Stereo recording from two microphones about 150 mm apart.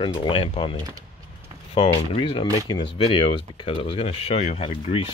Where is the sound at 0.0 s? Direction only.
35° left (ahead or behind).